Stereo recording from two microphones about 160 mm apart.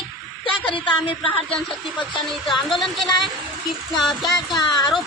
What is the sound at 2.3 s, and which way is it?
Speech, centre (ahead or behind).